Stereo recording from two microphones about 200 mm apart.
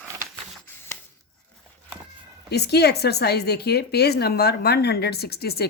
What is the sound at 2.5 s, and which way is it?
A woman's voice, 55° left (ahead or behind).